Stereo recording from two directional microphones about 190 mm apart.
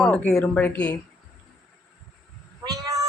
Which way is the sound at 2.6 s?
20° right (ahead or behind).